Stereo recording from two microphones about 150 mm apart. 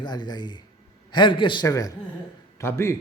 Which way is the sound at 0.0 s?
30° left (ahead or behind).